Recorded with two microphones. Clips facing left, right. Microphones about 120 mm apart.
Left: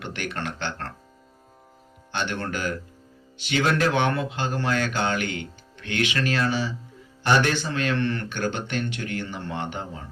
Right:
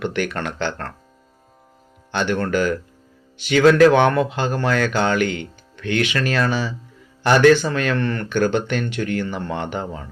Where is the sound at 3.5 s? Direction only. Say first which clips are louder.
Right 10 dB; 90° right.